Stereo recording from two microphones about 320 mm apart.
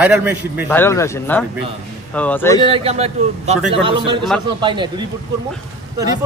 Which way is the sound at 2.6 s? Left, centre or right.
Centre.